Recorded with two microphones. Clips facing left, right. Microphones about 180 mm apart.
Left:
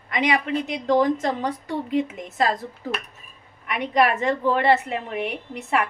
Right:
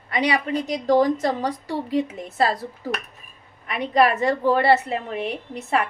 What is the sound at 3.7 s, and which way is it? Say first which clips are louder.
A woman's voice: right 2 dB; 35° right (ahead or behind).